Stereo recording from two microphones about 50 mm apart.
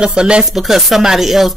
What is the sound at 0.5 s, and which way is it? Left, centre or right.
Speech, centre.